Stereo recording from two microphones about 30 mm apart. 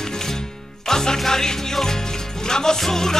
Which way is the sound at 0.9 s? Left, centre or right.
Centre.